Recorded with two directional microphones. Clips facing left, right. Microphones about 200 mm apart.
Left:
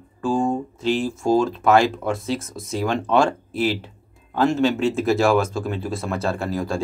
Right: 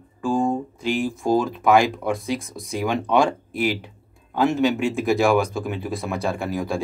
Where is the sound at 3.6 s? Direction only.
15° right (ahead or behind).